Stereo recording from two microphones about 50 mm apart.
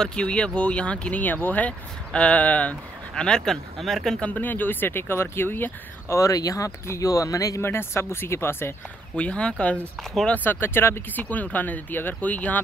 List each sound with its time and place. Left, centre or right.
0.0 s speech: left
1.2 s speech: left
3.2 s speech: centre
4.2 s speech: left
6.0 s speech: left
7.6 s speech: left
9.1 s speech: left
10.3 s speech: left
11.1 s speech: left